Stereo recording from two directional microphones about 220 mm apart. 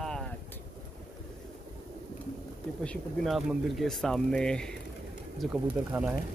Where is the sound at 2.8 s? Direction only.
Centre (ahead or behind).